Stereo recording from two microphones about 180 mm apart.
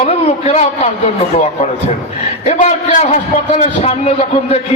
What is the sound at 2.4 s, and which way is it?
A man's voice, 40° left (ahead or behind).